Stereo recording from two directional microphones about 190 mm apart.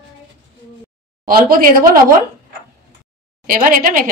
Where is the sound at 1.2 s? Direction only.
50° right (ahead or behind).